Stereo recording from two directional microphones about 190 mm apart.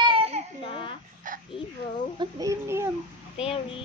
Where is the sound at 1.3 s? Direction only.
45° right (ahead or behind).